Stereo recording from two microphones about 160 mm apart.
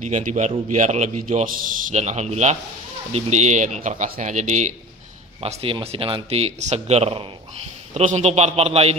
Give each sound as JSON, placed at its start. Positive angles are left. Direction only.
{"t": 0.0, "sound": "a man's voice", "side_deg": -50}
{"t": 5.4, "sound": "a man's voice", "side_deg": -40}